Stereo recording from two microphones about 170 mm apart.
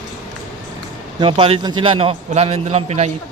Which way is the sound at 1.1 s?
30° right (ahead or behind).